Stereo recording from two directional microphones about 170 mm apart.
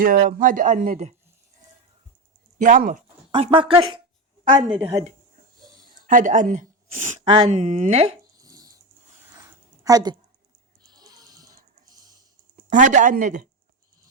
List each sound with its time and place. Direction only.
0.0 s speech: 55° right (ahead or behind)
2.6 s speech: 50° right (ahead or behind)
3.3 s speech: 30° right (ahead or behind)
5.9 s a woman's voice: 50° right (ahead or behind)
7.3 s speech: 30° right (ahead or behind)
7.5 s speech: 45° right (ahead or behind)
8.4 s dog: 20° right (ahead or behind)
9.3 s a sound: 20° right (ahead or behind)
12.7 s speech: 45° right (ahead or behind)